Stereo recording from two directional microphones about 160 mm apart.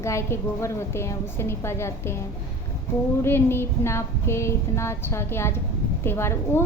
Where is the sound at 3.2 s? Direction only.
15° left (ahead or behind).